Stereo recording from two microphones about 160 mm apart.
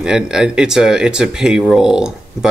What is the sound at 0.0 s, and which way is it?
Speech, 5° right (ahead or behind).